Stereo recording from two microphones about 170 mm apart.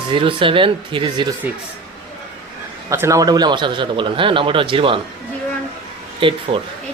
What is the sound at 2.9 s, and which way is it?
A man's voice, 15° right (ahead or behind).